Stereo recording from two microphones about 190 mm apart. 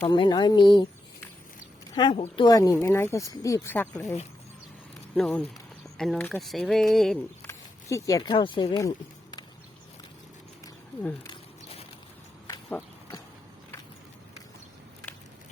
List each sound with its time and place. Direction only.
0.1 s speech: 25° left (ahead or behind)
2.0 s speech: 25° left (ahead or behind)
4.0 s speech: 35° left (ahead or behind)
5.1 s speech: 10° left (ahead or behind)
7.4 s speech: 15° left (ahead or behind)
11.3 s a sound: 30° left (ahead or behind)